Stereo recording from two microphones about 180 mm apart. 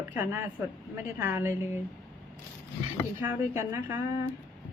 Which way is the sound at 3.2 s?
10° right (ahead or behind).